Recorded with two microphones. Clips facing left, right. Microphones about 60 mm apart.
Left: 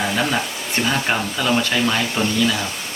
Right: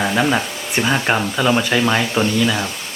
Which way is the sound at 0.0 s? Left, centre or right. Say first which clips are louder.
Right 3 dB; centre.